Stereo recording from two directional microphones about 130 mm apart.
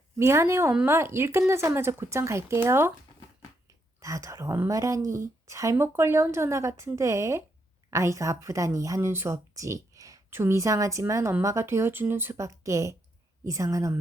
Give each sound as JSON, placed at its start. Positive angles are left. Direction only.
{"t": 0.2, "sound": "a woman's voice", "side_deg": -20}
{"t": 4.0, "sound": "a woman's voice", "side_deg": -25}